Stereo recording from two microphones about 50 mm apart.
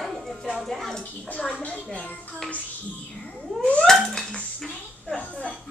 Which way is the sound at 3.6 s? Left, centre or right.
Left.